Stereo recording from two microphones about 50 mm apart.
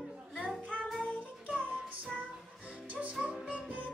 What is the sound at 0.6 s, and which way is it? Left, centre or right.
Child singing, right.